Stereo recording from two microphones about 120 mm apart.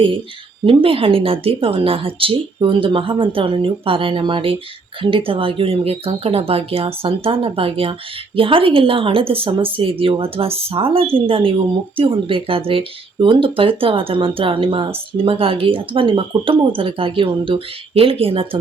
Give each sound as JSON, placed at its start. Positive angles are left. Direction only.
{"t": 0.6, "sound": "a woman's voice", "side_deg": -50}